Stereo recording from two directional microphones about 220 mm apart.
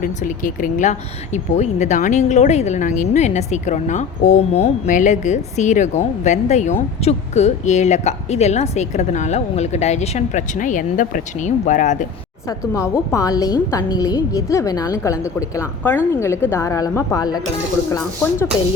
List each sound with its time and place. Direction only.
0.0 s speech: 35° left (ahead or behind)
12.5 s a woman's voice: 15° left (ahead or behind)